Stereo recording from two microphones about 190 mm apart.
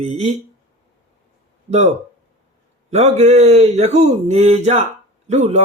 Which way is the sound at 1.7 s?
35° right (ahead or behind).